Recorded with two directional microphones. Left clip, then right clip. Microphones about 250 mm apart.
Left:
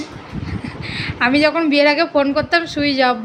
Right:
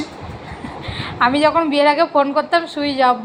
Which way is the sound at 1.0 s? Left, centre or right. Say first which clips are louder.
Even; left.